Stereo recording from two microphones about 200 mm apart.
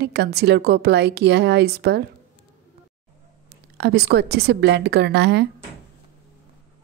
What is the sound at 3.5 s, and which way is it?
A woman's voice, 55° right (ahead or behind).